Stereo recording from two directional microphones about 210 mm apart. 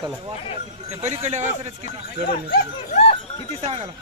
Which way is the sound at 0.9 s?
30° right (ahead or behind).